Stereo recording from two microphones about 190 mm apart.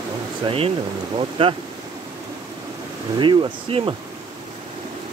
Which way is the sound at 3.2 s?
25° right (ahead or behind).